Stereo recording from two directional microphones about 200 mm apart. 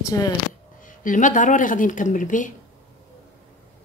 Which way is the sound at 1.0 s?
40° left (ahead or behind).